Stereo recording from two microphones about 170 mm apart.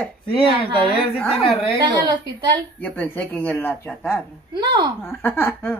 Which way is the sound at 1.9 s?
25° right (ahead or behind).